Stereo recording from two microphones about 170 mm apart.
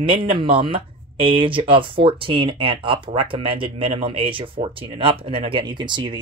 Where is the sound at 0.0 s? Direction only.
30° right (ahead or behind).